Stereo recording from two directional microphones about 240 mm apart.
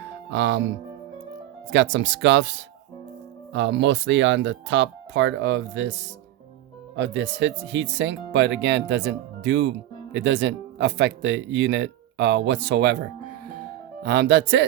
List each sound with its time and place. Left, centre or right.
0.3 s speech: right
1.7 s speech: right
14.0 s speech: right